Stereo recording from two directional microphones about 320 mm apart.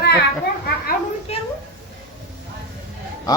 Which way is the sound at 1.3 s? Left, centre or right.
Centre.